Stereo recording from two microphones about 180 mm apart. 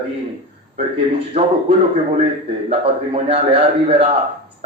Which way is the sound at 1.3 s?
35° right (ahead or behind).